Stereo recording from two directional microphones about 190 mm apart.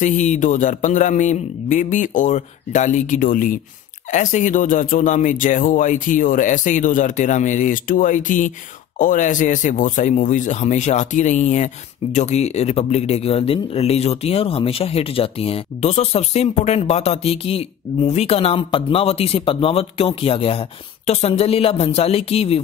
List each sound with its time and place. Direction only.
0.0 s speech: 40° left (ahead or behind)